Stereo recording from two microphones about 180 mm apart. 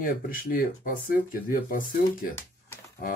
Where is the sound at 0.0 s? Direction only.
55° left (ahead or behind).